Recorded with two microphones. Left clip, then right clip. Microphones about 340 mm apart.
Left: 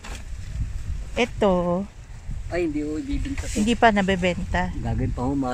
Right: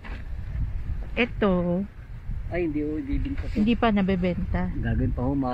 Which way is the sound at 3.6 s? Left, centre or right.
Left.